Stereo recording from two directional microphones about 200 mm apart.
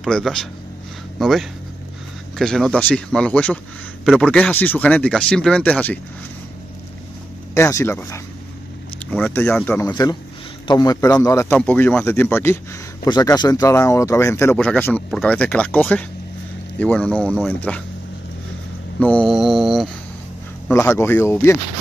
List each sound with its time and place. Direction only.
0.0 s speech: centre (ahead or behind)
7.5 s speech: 15° left (ahead or behind)
18.9 s speech: 5° left (ahead or behind)
20.6 s speech: 10° left (ahead or behind)